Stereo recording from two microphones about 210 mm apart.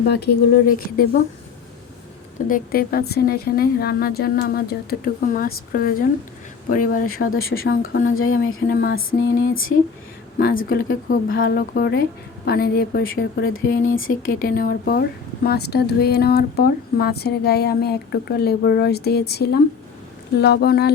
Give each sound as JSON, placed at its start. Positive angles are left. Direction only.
{"t": 0.1, "sound": "speech", "side_deg": 45}
{"t": 2.5, "sound": "speech", "side_deg": 45}
{"t": 7.0, "sound": "speech", "side_deg": 90}
{"t": 7.3, "sound": "speech", "side_deg": 45}
{"t": 7.8, "sound": "speech", "side_deg": 70}
{"t": 8.7, "sound": "a sound", "side_deg": 55}
{"t": 10.3, "sound": "speech", "side_deg": 45}
{"t": 13.7, "sound": "speech", "side_deg": 45}